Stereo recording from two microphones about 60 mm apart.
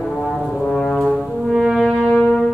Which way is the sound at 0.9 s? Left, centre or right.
Centre.